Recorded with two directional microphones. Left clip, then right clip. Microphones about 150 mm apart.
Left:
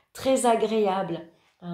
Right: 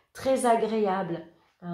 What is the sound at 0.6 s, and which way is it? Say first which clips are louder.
A woman's voice: left 2 dB; 25° left (ahead or behind).